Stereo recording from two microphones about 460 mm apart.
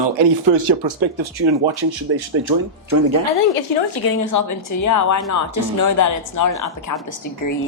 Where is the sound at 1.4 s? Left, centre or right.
Right.